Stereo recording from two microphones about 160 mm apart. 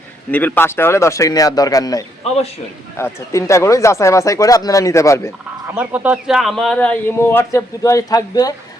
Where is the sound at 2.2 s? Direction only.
40° left (ahead or behind).